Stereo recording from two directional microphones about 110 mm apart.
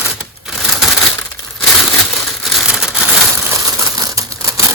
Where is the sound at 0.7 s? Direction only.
Centre (ahead or behind).